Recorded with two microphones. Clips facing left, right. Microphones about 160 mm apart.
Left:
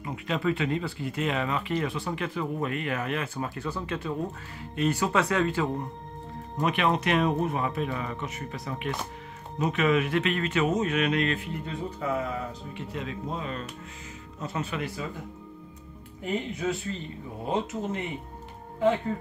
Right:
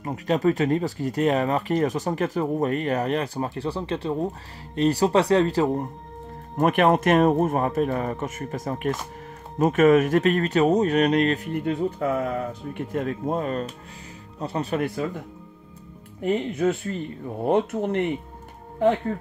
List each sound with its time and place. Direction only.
0.0 s speech: 40° right (ahead or behind)
11.5 s speech: 60° right (ahead or behind)
14.4 s speech: 35° right (ahead or behind)
16.5 s speech: 55° right (ahead or behind)